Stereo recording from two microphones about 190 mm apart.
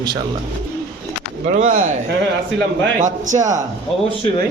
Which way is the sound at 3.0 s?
40° right (ahead or behind).